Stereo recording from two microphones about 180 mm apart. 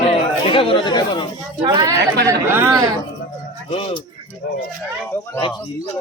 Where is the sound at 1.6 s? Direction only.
20° right (ahead or behind).